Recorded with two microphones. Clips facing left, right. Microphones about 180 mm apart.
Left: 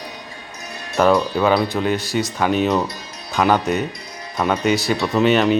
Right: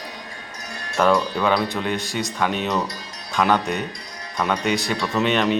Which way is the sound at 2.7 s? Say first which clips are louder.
Left 3 dB; 25° left (ahead or behind).